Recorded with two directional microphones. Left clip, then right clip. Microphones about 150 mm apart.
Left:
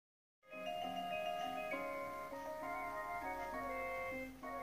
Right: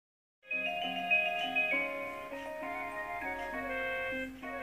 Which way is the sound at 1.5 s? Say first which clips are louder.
Right 11 dB; 30° right (ahead or behind).